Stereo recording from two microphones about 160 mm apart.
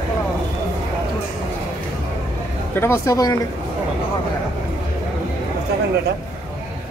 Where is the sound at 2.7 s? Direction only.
15° left (ahead or behind).